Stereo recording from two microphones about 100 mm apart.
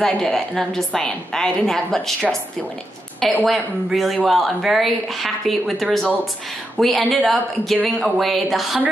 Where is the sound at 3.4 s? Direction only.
Centre (ahead or behind).